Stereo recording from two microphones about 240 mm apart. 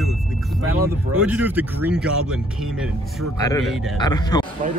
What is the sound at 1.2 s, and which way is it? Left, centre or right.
Speech, centre.